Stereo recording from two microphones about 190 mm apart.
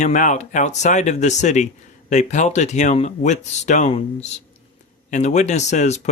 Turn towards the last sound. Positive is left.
turn(degrees=35)  # may be behind; listen again after turning